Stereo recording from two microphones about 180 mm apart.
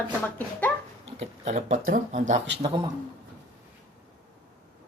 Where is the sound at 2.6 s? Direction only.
25° right (ahead or behind).